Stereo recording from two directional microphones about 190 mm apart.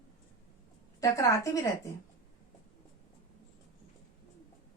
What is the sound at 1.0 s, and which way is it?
Speech, 15° left (ahead or behind).